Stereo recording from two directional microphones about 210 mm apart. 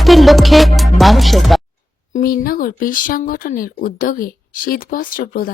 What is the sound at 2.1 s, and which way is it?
Speech, 45° left (ahead or behind).